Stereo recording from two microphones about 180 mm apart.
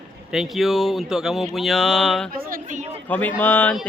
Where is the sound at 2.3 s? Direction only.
50° right (ahead or behind).